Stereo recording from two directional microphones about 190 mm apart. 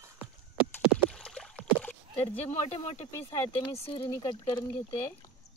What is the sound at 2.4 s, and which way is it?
Speech, 35° left (ahead or behind).